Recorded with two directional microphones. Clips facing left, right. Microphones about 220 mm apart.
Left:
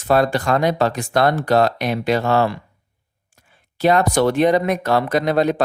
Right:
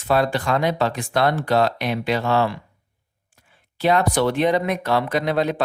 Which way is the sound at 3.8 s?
45° left (ahead or behind).